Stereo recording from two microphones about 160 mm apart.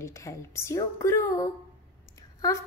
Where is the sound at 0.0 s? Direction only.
20° left (ahead or behind).